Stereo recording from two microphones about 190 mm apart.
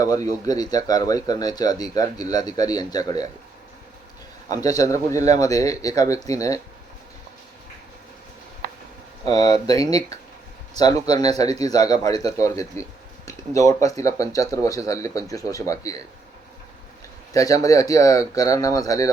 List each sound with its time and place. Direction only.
0.0 s speech: 20° left (ahead or behind)
4.4 s speech: 20° left (ahead or behind)
9.3 s speech: 20° left (ahead or behind)
17.3 s speech: 20° left (ahead or behind)